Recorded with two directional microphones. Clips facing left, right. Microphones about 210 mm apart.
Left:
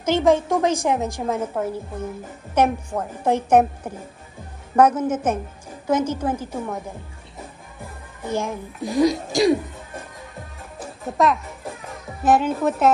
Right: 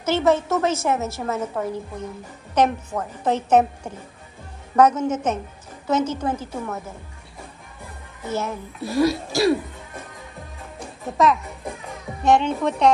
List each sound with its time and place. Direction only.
0.0 s a woman's voice: 10° left (ahead or behind)
8.3 s a woman's voice: 15° left (ahead or behind)
10.8 s music: centre (ahead or behind)